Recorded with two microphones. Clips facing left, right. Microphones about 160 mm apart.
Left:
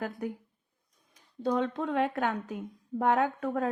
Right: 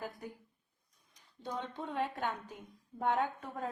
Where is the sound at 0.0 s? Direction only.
70° left (ahead or behind).